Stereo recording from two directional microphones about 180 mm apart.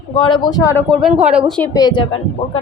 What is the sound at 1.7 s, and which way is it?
Speech, 25° left (ahead or behind).